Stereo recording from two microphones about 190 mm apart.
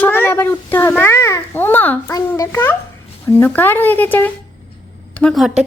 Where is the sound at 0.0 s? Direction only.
10° left (ahead or behind).